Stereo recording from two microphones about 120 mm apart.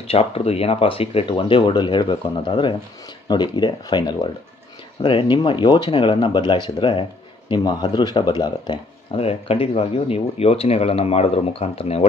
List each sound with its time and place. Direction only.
0.0 s speech: 55° left (ahead or behind); by 9.2 s 35° left (ahead or behind)
9.2 s speech: 55° left (ahead or behind)